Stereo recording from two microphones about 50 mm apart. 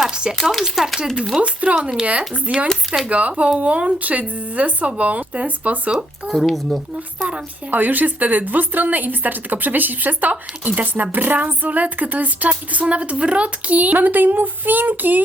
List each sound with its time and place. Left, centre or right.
0.1 s speech: centre
1.7 s speech: centre
2.6 s speech: centre
3.1 s speech: right
6.2 s speech: centre
7.3 s speech: right
7.8 s a woman's voice: right